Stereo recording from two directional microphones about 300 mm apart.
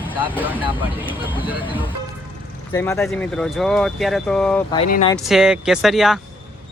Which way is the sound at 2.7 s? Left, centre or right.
Centre.